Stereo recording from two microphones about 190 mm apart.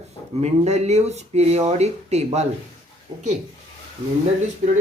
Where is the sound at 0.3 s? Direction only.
35° right (ahead or behind).